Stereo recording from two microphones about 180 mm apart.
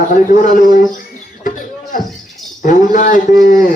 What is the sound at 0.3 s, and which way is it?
Speech, 45° left (ahead or behind).